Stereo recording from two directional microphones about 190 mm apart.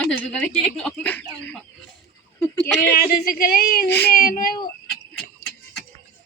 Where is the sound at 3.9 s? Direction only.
10° left (ahead or behind).